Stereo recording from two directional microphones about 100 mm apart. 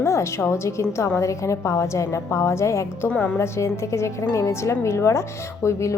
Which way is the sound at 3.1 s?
20° left (ahead or behind).